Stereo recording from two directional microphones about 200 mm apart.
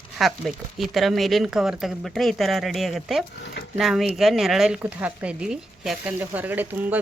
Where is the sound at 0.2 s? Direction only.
Centre (ahead or behind).